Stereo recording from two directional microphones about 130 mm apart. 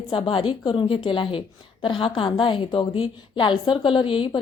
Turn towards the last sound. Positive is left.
turn(degrees=40)  # may be behind; listen again after turning